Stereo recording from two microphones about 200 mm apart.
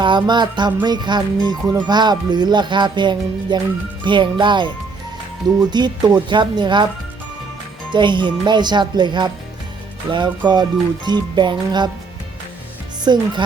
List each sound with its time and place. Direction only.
0.0 s music: 20° right (ahead or behind)
7.9 s music: 25° right (ahead or behind)
13.1 s music: 20° right (ahead or behind)